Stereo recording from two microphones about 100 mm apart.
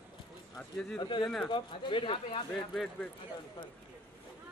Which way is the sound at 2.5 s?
5° left (ahead or behind).